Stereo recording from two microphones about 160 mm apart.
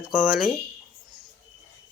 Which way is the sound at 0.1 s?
5° right (ahead or behind).